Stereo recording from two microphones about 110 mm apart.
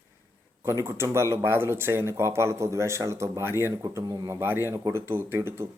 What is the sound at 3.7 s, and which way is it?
A man's voice, 35° right (ahead or behind).